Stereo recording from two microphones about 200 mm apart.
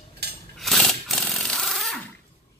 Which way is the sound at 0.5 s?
Centre (ahead or behind).